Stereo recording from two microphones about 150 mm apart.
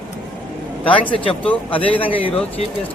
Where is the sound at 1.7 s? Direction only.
35° left (ahead or behind).